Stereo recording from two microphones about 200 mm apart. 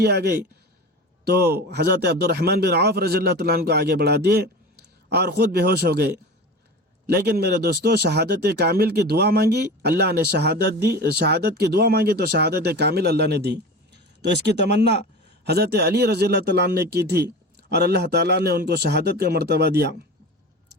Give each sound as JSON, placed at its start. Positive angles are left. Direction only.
{"t": 0.0, "sound": "a man's voice", "side_deg": -55}